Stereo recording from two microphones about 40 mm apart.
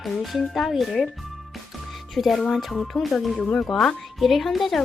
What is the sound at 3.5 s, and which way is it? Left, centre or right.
Speech, left.